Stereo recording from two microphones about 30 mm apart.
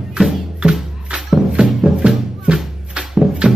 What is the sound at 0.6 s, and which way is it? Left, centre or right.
Music, right.